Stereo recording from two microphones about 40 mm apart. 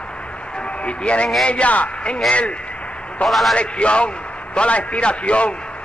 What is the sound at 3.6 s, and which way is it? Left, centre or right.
A man's voice, left.